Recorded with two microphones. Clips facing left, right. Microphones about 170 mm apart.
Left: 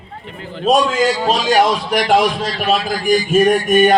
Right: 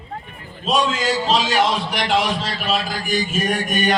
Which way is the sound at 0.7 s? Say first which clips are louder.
Left 6 dB; 50° left (ahead or behind).